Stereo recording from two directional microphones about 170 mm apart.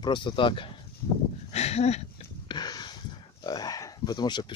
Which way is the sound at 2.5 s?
25° left (ahead or behind).